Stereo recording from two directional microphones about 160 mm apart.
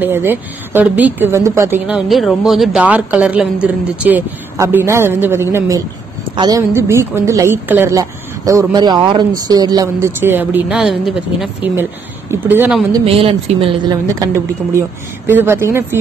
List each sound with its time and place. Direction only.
0.0 s a woman's voice: 15° right (ahead or behind)
1.9 s a woman's voice: centre (ahead or behind)
11.7 s a woman's voice: 15° right (ahead or behind)
13.0 s speech: 40° right (ahead or behind)
15.2 s a woman's voice: 15° right (ahead or behind)